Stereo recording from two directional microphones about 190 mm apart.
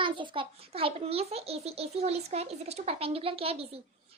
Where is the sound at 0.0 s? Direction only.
25° right (ahead or behind).